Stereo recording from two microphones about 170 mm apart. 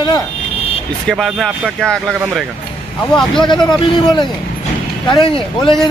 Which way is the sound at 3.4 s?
25° left (ahead or behind).